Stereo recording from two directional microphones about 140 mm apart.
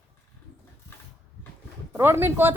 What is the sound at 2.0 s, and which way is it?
Speech, 15° right (ahead or behind).